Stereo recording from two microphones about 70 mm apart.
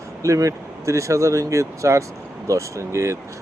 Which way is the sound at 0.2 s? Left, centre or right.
Right.